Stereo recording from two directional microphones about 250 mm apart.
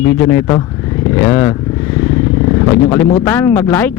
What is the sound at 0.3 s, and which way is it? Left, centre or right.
A man's voice, centre.